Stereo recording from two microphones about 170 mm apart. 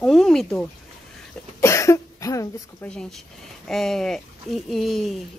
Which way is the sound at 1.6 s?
15° left (ahead or behind).